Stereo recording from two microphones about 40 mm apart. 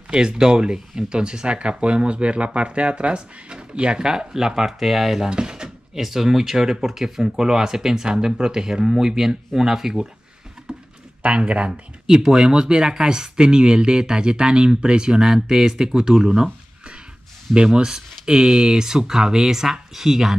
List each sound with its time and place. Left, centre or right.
0.1 s speech: centre
5.3 s drawer open or close: centre
5.9 s speech: centre
10.7 s a sound: centre
11.2 s speech: right
12.3 s speech: centre
17.7 s speech: centre